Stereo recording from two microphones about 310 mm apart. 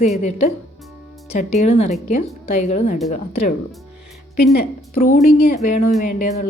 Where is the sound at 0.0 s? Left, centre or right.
Left.